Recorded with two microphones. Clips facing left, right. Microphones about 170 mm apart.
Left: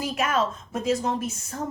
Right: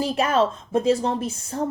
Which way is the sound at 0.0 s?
30° right (ahead or behind).